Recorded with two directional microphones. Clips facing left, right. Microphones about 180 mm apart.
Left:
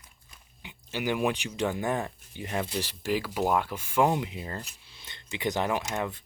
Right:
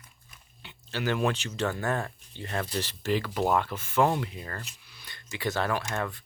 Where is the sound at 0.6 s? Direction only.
15° left (ahead or behind).